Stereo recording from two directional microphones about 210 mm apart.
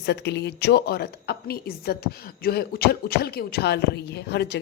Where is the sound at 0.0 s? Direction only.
55° left (ahead or behind).